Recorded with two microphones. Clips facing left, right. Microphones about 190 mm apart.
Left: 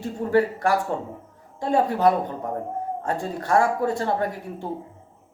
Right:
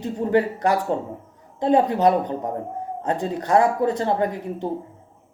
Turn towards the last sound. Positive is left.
turn(degrees=-20)  # may be behind; listen again after turning